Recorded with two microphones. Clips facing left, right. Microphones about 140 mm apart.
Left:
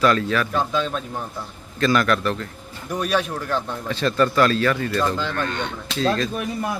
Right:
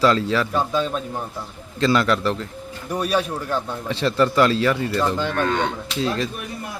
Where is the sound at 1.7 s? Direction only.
20° right (ahead or behind).